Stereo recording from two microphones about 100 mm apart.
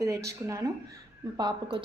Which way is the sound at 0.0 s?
30° right (ahead or behind).